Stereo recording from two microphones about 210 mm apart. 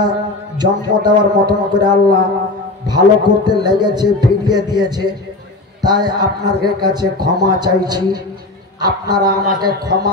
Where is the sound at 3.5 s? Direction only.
20° right (ahead or behind).